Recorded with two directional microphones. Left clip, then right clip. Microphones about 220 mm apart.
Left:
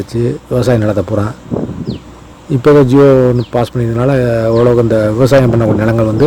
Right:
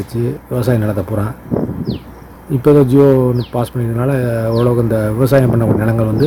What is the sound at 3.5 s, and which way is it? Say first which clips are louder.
Speech: left 5 dB; 35° left (ahead or behind).